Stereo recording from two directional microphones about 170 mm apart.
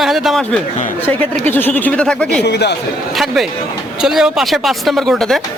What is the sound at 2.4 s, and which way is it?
Speech, 75° left (ahead or behind).